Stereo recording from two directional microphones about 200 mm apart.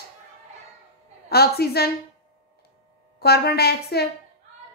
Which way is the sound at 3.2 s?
50° left (ahead or behind).